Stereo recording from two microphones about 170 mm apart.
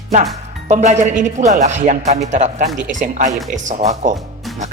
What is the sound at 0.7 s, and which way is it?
Speech, 45° right (ahead or behind).